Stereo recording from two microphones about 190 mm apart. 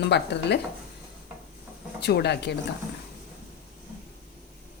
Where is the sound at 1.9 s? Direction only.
60° left (ahead or behind).